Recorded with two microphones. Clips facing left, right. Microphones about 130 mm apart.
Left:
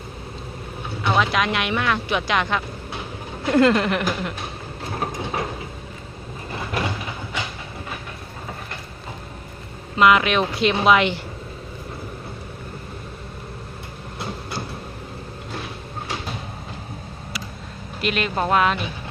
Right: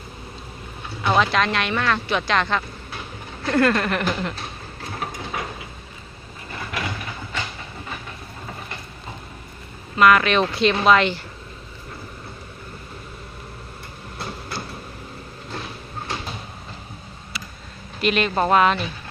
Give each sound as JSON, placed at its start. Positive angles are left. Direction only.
{"t": 1.0, "sound": "vehicle", "side_deg": -5}
{"t": 1.3, "sound": "speech", "side_deg": 10}
{"t": 5.2, "sound": "vehicle", "side_deg": 30}
{"t": 6.7, "sound": "a sound", "side_deg": 30}
{"t": 10.0, "sound": "speech", "side_deg": 15}
{"t": 18.0, "sound": "speech", "side_deg": 0}